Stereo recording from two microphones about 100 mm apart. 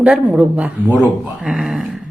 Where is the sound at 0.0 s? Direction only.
10° right (ahead or behind).